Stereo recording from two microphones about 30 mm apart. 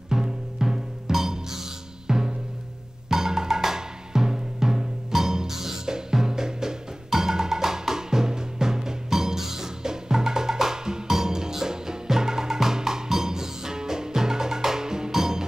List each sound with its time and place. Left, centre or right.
0.1 s music: centre
3.1 s drum: centre
6.2 s music: centre